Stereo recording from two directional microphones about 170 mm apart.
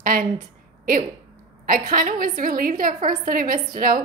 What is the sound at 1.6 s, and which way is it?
A woman's voice, 55° right (ahead or behind).